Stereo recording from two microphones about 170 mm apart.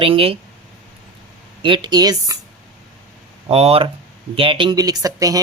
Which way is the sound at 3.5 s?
35° right (ahead or behind).